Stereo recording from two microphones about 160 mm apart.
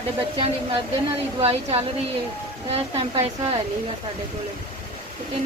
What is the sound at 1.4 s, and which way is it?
Speech, 40° right (ahead or behind).